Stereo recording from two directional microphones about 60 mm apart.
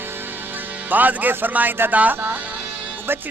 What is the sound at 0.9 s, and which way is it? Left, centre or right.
Speech, right.